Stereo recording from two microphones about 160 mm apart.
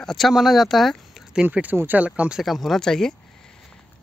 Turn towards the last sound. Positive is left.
turn(degrees=5)  # may be behind; listen again after turning